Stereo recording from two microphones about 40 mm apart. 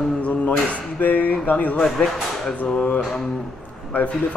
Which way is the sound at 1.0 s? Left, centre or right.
Left.